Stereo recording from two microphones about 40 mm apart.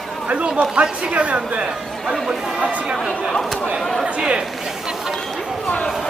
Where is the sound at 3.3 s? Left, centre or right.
Centre.